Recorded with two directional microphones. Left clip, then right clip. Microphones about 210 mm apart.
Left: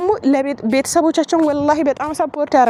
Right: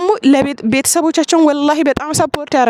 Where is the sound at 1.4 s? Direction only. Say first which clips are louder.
Right 4 dB; 70° right (ahead or behind).